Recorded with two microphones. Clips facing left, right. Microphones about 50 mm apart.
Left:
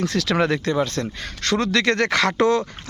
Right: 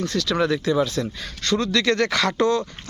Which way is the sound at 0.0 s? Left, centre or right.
Left.